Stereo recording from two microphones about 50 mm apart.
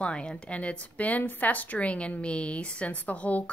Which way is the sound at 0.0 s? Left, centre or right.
Centre.